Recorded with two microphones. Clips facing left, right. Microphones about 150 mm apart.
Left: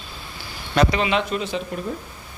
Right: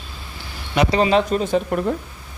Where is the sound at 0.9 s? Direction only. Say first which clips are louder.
Right 5 dB; 40° right (ahead or behind).